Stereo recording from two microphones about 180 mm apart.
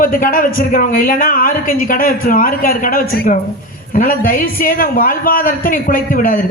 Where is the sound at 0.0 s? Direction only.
50° left (ahead or behind).